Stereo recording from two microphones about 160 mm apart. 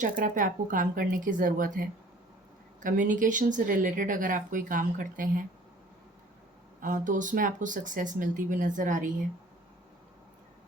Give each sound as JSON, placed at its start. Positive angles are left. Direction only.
{"t": 0.0, "sound": "speech", "side_deg": -55}
{"t": 6.8, "sound": "speech", "side_deg": -55}